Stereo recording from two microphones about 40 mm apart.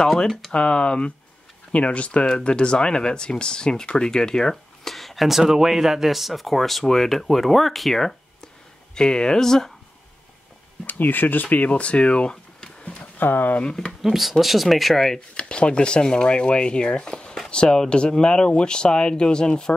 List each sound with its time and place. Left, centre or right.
0.5 s speech: left; by 8.1 s centre
8.9 s speech: centre
10.9 s speech: left
11.4 s speech: left
13.2 s speech: left
14.0 s speech: centre
15.1 s speech: left